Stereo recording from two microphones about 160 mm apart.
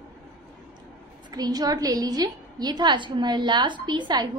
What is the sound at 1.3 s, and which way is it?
A woman's voice, 25° right (ahead or behind).